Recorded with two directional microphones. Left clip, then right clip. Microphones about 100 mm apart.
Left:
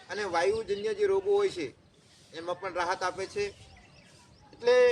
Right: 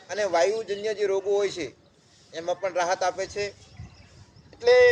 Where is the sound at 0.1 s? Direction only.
40° left (ahead or behind).